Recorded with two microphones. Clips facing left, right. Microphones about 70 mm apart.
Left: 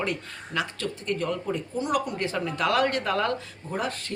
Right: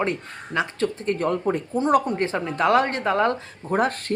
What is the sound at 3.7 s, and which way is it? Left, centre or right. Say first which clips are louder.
Speech: right 8 dB; right.